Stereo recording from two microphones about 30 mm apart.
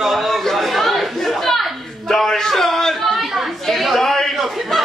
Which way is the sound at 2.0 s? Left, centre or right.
Centre.